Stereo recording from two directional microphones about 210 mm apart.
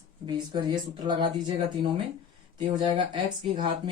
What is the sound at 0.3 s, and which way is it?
Speech, 20° right (ahead or behind).